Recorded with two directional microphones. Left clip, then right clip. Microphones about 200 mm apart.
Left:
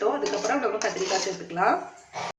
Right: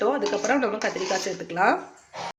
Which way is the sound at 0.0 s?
50° right (ahead or behind).